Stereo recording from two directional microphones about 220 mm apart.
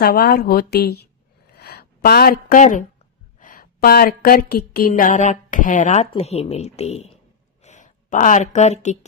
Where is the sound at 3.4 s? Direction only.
40° left (ahead or behind).